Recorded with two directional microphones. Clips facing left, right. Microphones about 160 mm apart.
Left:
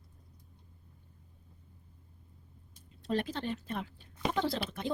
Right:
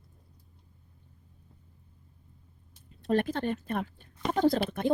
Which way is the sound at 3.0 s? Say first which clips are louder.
Right 6 dB; 50° right (ahead or behind).